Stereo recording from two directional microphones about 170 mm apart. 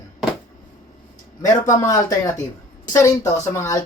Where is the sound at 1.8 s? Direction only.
20° left (ahead or behind).